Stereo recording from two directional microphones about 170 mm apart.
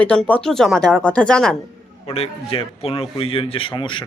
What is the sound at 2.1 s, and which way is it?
Speech, 35° left (ahead or behind).